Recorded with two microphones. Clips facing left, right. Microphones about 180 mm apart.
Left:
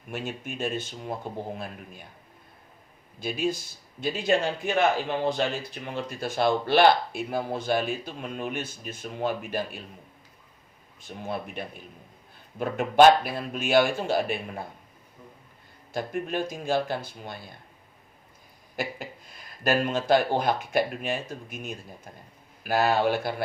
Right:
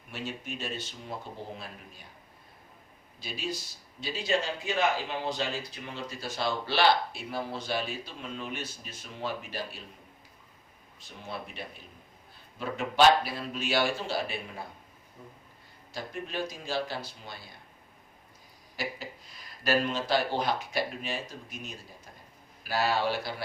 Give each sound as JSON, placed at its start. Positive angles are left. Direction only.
{"t": 0.1, "sound": "speech", "side_deg": 50}
{"t": 3.2, "sound": "speech", "side_deg": 50}
{"t": 11.1, "sound": "speech", "side_deg": 50}
{"t": 15.9, "sound": "speech", "side_deg": 50}
{"t": 18.8, "sound": "speech", "side_deg": 50}